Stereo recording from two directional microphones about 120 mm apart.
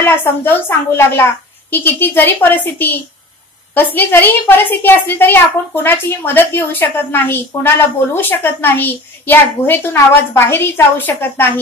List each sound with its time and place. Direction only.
0.0 s a woman's voice: 20° left (ahead or behind)